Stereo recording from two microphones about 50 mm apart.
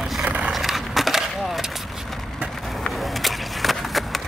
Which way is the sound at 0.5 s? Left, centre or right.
Centre.